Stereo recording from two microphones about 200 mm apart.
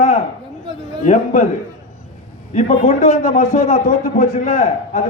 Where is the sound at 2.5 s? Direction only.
35° left (ahead or behind).